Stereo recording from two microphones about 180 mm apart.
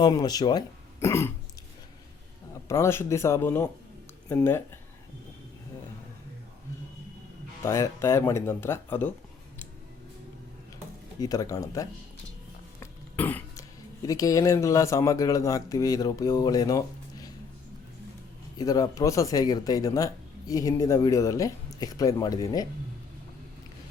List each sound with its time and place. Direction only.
0.0 s speech: 20° left (ahead or behind)
2.6 s speech: 15° left (ahead or behind)
7.6 s speech: 15° left (ahead or behind)
11.2 s speech: 20° left (ahead or behind)
18.5 s speech: 20° left (ahead or behind)